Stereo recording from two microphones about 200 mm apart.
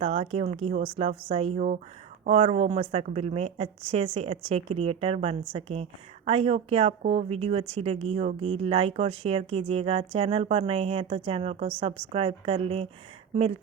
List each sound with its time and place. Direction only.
0.0 s a woman's voice: 30° right (ahead or behind)